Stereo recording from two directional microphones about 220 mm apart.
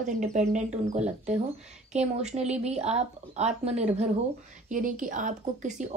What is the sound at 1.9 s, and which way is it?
Speech, 30° right (ahead or behind).